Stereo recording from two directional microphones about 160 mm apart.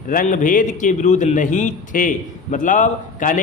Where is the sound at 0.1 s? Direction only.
55° left (ahead or behind).